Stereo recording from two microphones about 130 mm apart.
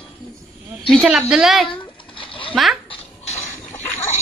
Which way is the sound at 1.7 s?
40° left (ahead or behind).